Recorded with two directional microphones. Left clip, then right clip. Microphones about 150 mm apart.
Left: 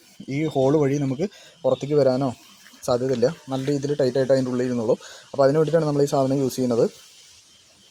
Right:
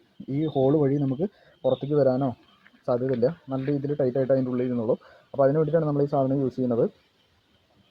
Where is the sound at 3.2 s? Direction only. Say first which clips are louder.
Left 3 dB; 35° left (ahead or behind).